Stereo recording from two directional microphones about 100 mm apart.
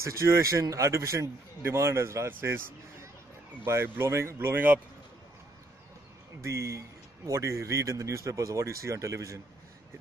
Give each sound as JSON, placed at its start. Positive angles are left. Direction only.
{"t": 0.0, "sound": "speech", "side_deg": -30}
{"t": 3.6, "sound": "speech", "side_deg": -25}
{"t": 6.4, "sound": "speech", "side_deg": -30}